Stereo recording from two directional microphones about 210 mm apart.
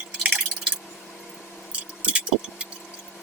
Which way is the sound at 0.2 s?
5° right (ahead or behind).